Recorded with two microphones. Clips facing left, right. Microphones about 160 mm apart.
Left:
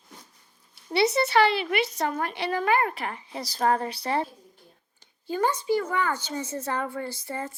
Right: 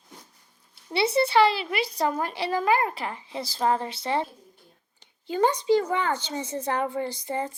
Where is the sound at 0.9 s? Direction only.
30° right (ahead or behind).